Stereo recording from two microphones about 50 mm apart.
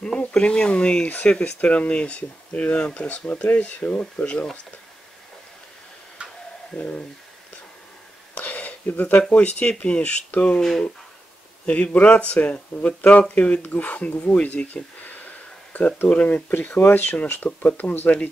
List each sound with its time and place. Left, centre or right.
0.3 s speech: centre
6.2 s tick-tock: right
6.7 s speech: left
8.4 s a sound: left
9.3 s speech: left
10.4 s speech: centre
11.6 s speech: left